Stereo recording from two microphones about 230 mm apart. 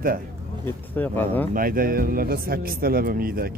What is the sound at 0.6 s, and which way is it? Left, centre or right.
Speech, centre.